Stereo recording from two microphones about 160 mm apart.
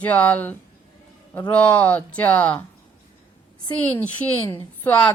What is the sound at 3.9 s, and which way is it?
Speech, 15° left (ahead or behind).